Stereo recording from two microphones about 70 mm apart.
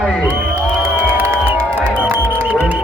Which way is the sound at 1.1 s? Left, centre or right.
Right.